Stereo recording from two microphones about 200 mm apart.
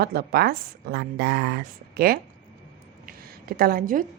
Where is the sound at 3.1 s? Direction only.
50° right (ahead or behind).